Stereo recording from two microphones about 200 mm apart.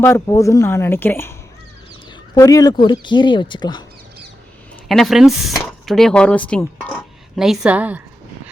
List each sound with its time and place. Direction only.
0.0 s speech: 15° left (ahead or behind)
2.3 s speech: 15° left (ahead or behind)
4.9 s speech: centre (ahead or behind)